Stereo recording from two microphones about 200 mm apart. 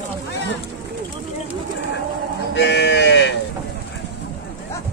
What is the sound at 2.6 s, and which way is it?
Sheep, 60° left (ahead or behind).